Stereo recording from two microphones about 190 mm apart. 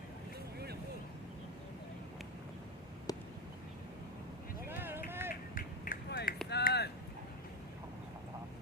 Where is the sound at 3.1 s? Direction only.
20° left (ahead or behind).